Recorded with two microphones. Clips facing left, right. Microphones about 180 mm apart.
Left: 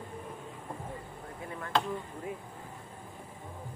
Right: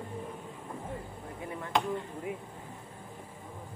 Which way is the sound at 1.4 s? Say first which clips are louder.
Right 1 dB; 20° right (ahead or behind).